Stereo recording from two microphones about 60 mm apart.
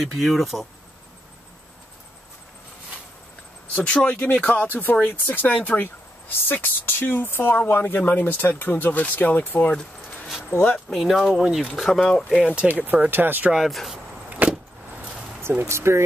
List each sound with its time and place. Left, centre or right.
0.2 s speech: centre
3.7 s speech: centre
10.9 s speech: centre
11.7 s speech: centre
12.4 s speech: centre
12.8 s speech: right
13.7 s speech: centre
13.9 s vehicle: right
15.6 s speech: right